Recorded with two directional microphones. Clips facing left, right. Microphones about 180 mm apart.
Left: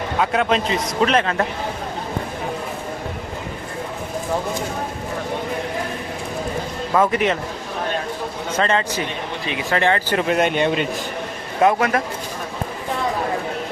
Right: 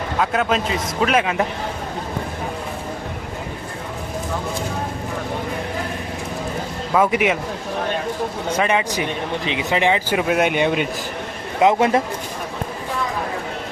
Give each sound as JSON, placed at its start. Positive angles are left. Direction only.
{"t": 0.2, "sound": "a man's voice", "side_deg": 0}
{"t": 6.9, "sound": "speech", "side_deg": -10}
{"t": 8.5, "sound": "speech", "side_deg": -15}
{"t": 11.6, "sound": "a man's voice", "side_deg": -20}